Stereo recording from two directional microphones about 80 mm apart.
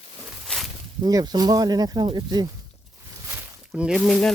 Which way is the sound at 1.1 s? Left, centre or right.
Right.